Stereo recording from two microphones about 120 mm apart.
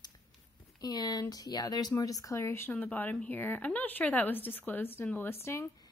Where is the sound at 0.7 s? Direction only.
35° left (ahead or behind).